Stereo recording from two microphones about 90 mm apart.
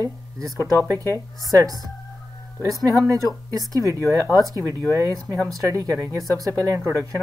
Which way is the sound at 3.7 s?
40° right (ahead or behind).